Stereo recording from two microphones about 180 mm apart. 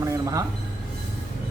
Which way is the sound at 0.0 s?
15° right (ahead or behind).